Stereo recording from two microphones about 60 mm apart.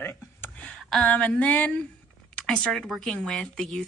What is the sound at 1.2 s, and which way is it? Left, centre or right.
Speech, centre.